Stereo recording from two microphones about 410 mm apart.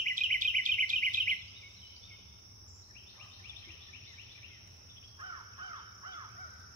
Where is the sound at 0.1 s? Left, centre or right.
Centre.